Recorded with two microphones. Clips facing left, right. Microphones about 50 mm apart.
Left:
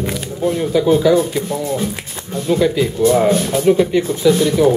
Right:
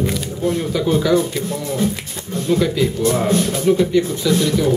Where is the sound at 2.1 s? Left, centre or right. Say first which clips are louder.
Left 1 dB; left.